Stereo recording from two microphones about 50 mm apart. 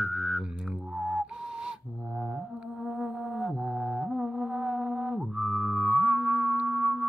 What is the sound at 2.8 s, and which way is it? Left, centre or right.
Music, centre.